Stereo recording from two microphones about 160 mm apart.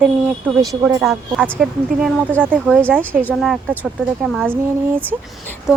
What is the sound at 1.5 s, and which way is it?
Speech, 5° left (ahead or behind).